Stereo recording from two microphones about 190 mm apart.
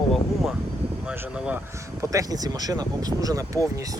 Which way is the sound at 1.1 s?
5° right (ahead or behind).